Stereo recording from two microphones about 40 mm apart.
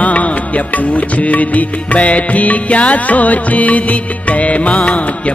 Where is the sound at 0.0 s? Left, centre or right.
Left.